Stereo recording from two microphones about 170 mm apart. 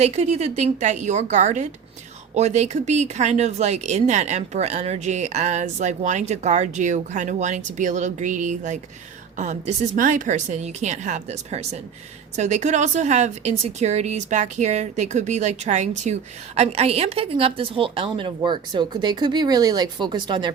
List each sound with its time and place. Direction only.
0.0 s a woman's voice: 40° right (ahead or behind)